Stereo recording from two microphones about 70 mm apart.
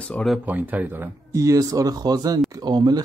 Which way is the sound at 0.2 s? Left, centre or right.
Centre.